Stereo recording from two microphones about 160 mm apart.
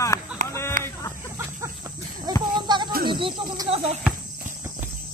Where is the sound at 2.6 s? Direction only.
25° right (ahead or behind).